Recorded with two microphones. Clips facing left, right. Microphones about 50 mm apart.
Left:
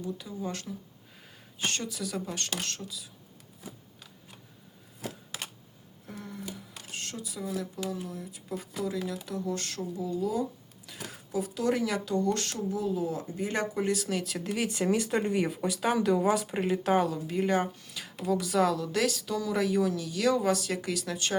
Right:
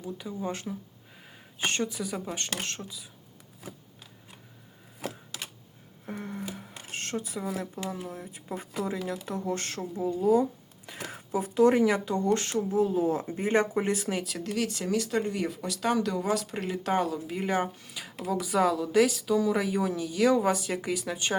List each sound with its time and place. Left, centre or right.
0.0 s speech: right
1.2 s a sound: centre
1.6 s speech: right
6.1 s a sound: right
6.7 s speech: right
12.8 s speech: right
14.3 s speech: centre